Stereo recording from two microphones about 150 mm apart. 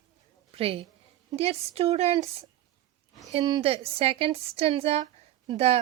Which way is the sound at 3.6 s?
40° right (ahead or behind).